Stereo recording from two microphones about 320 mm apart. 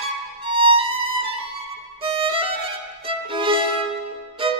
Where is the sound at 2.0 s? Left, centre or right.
Centre.